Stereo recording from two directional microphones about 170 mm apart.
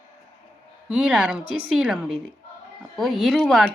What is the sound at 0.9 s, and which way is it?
A woman's voice, 5° right (ahead or behind).